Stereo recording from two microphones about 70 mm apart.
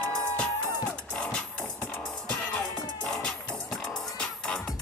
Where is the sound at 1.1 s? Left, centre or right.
Centre.